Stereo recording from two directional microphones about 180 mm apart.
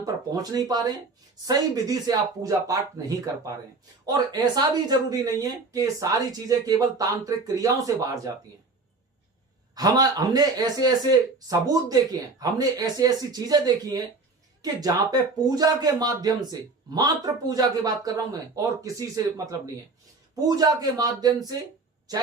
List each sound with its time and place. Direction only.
0.0 s speech: 20° right (ahead or behind)
4.0 s speech: 20° right (ahead or behind)
9.7 s speech: 20° right (ahead or behind)